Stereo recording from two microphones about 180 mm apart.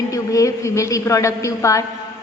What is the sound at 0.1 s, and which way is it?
A woman's voice, 20° left (ahead or behind).